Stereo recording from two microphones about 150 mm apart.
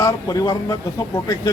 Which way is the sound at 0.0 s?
25° left (ahead or behind).